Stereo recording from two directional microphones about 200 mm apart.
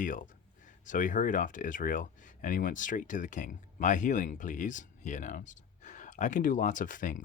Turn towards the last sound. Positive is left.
turn(degrees=40)  # may be behind; listen again after turning